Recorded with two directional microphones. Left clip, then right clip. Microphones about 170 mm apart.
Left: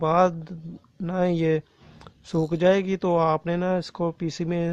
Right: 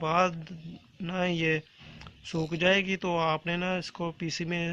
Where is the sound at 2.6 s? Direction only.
60° left (ahead or behind).